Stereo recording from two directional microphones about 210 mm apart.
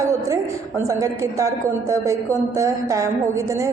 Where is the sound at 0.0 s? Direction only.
15° right (ahead or behind).